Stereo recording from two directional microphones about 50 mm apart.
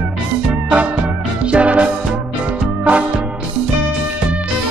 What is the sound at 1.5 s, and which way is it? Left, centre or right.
Music, right.